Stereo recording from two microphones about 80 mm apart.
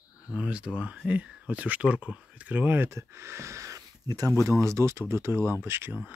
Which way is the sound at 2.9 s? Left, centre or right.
Right.